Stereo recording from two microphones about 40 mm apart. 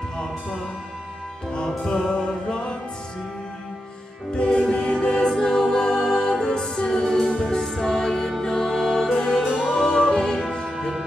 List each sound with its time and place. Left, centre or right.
1.5 s music: left
4.4 s music: left
10.8 s music: centre